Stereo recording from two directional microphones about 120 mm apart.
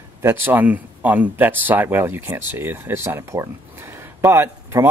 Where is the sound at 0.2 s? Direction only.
20° right (ahead or behind).